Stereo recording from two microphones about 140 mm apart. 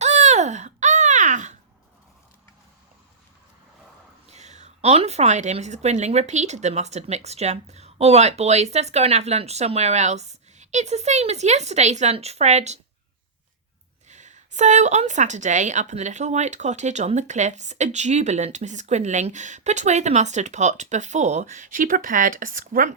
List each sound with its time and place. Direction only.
0.0 s babbling: 55° right (ahead or behind)
4.3 s a woman's voice: 55° right (ahead or behind)
14.1 s speech: 60° right (ahead or behind); by 23.0 s 80° right